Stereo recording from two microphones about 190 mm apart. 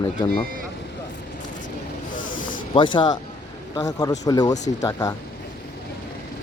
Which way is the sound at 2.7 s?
25° left (ahead or behind).